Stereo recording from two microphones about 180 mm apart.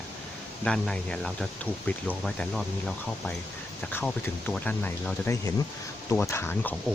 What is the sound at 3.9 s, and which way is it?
Speech, 10° left (ahead or behind).